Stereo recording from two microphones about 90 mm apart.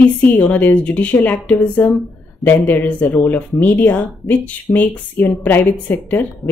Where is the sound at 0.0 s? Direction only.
20° left (ahead or behind).